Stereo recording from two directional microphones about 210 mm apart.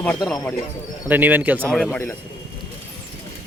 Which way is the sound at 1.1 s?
10° right (ahead or behind).